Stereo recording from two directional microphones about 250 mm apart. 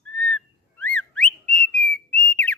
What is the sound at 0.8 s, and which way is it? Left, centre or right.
Whistling, centre.